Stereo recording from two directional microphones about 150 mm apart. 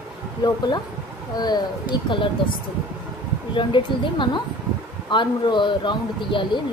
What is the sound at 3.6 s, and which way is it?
Speech, 35° left (ahead or behind).